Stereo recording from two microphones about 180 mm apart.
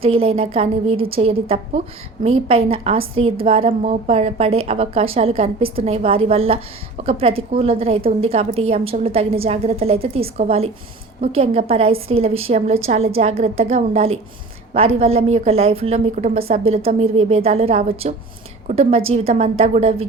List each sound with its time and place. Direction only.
0.0 s a woman's voice: 30° right (ahead or behind)